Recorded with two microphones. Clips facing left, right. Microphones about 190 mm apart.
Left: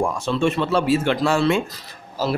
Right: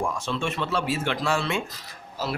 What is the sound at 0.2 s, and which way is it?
Speech, 35° left (ahead or behind).